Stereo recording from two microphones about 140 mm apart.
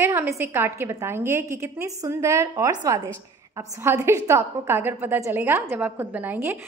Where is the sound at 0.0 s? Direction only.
20° right (ahead or behind).